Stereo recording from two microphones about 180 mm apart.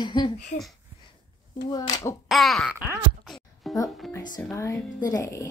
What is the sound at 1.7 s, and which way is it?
Speech, 20° left (ahead or behind).